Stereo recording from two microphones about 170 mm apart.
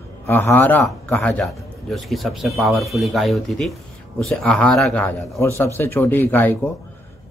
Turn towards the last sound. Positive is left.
turn(degrees=10)  # may be behind; listen again after turning